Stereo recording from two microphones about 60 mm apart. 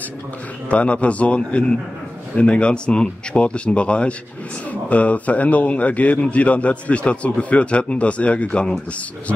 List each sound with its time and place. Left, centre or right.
0.7 s a man's voice: left